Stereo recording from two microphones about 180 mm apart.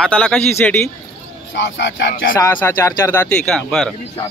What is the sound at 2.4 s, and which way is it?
A man's voice, 15° left (ahead or behind).